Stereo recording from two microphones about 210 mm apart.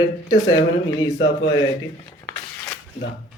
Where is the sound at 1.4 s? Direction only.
20° left (ahead or behind).